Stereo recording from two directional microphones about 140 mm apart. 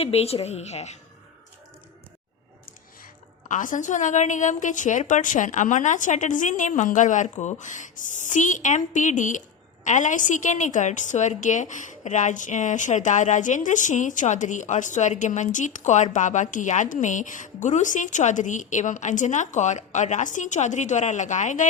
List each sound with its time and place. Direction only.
0.0 s a woman's voice: 45° left (ahead or behind)
3.5 s a woman's voice: 65° left (ahead or behind)